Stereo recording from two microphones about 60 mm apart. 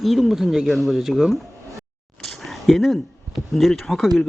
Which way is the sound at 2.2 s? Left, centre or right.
Centre.